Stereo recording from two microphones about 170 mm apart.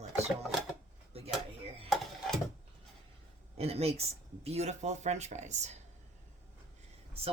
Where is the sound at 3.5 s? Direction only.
35° right (ahead or behind).